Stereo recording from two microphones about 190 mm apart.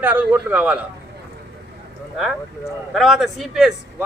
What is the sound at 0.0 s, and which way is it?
Speech, 10° right (ahead or behind).